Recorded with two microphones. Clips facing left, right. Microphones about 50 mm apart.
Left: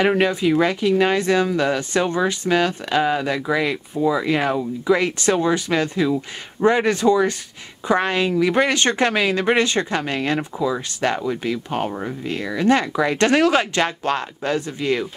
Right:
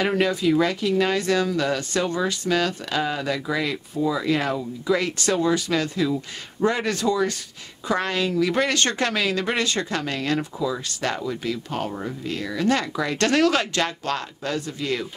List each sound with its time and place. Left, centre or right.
0.0 s speech: left